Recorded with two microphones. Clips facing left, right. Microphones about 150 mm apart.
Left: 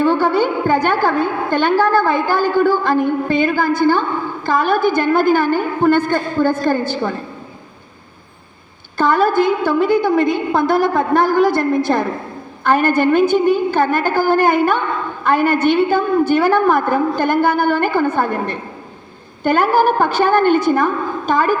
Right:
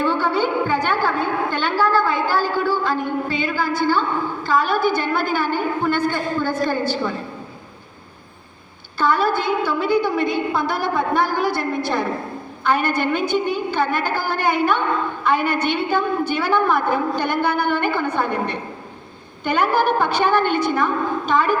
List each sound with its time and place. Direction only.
0.0 s a woman's voice: 45° left (ahead or behind)
9.0 s a woman's voice: 45° left (ahead or behind)